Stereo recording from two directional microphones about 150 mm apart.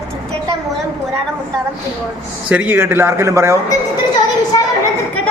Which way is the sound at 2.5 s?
10° right (ahead or behind).